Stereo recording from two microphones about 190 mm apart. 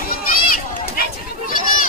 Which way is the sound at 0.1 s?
50° left (ahead or behind).